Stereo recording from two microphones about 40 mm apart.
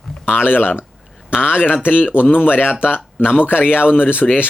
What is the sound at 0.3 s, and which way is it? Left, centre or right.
Speech, left.